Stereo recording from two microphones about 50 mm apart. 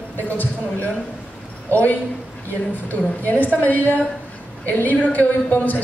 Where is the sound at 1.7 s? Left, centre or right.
Left.